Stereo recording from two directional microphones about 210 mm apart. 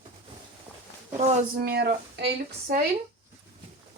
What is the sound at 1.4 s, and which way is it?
Speech, 45° right (ahead or behind).